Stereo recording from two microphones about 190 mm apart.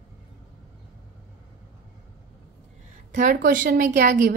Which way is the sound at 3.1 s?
45° right (ahead or behind).